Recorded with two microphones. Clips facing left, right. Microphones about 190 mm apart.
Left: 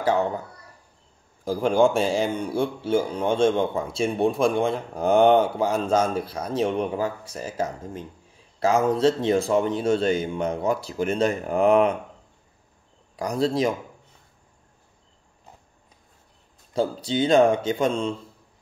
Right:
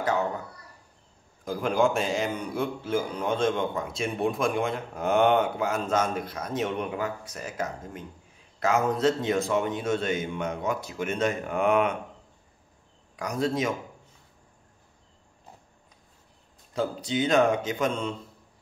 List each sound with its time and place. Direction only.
0.0 s speech: 30° left (ahead or behind)
1.4 s a man's voice: 30° left (ahead or behind)
13.1 s a man's voice: 35° left (ahead or behind)
16.7 s a man's voice: 30° left (ahead or behind)